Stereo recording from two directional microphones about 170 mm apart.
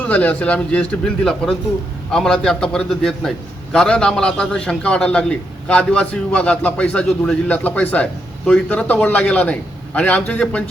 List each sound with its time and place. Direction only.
0.0 s a man's voice: 10° left (ahead or behind)